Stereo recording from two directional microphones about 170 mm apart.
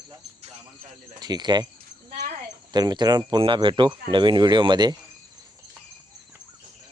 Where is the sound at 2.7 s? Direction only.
25° right (ahead or behind).